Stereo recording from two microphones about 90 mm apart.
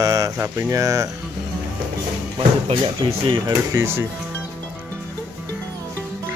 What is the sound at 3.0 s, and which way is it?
Speech, 75° right (ahead or behind).